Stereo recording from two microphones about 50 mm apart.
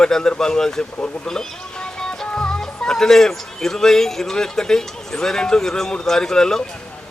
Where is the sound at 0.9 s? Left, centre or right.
Left.